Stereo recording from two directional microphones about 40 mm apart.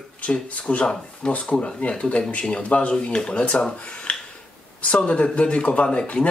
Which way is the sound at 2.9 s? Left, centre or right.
Left.